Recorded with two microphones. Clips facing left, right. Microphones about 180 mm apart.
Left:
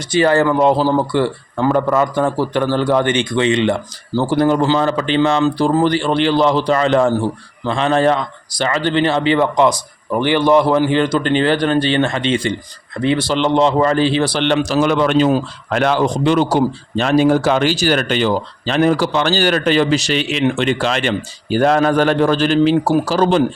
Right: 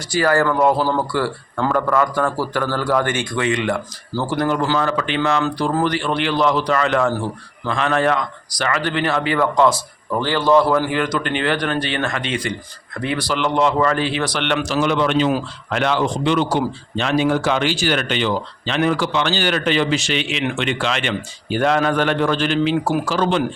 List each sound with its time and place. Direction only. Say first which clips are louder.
0.1 s a man's voice: left 4 dB; 20° left (ahead or behind); by 23.5 s 35° left (ahead or behind)